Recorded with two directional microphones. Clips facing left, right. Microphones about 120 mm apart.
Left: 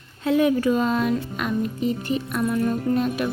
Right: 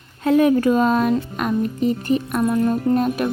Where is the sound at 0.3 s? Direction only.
50° right (ahead or behind).